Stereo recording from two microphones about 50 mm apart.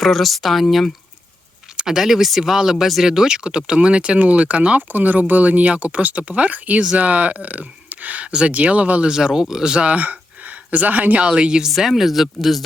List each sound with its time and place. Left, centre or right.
0.0 s speech: centre
1.7 s speech: centre; by 8.3 s right
8.3 s speech: centre
9.1 s speech: centre
9.8 s speech: right
11.3 s speech: centre
11.8 s speech: centre